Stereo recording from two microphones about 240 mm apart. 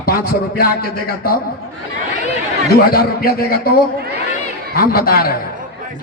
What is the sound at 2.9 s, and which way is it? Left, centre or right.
Speech, left.